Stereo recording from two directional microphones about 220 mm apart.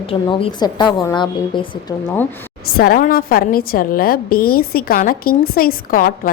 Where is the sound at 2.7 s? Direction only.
40° left (ahead or behind).